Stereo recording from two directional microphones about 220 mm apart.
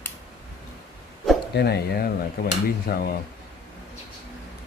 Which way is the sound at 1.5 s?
50° left (ahead or behind).